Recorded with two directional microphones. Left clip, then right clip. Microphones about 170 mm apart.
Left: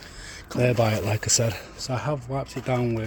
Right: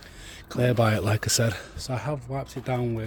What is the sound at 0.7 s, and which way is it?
Speech, 30° right (ahead or behind).